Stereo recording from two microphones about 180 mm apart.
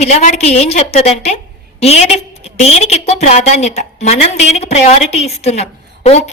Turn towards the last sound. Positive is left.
turn(degrees=35)  # may be behind; listen again after turning